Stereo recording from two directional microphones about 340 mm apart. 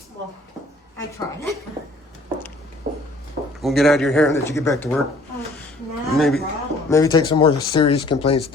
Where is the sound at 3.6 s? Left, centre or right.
Centre.